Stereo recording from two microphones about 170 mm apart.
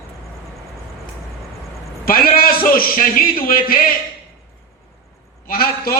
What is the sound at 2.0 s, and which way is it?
A man's voice, 60° left (ahead or behind).